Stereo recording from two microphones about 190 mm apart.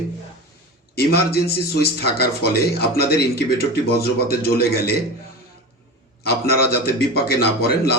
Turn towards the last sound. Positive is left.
turn(degrees=55)  # may be behind; listen again after turning